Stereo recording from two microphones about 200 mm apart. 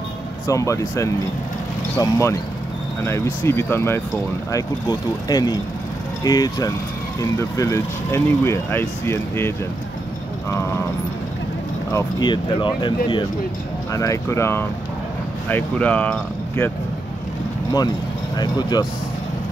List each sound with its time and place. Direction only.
0.5 s speech: 15° left (ahead or behind)
11.9 s speech: 20° left (ahead or behind)
18.4 s speech: 20° left (ahead or behind)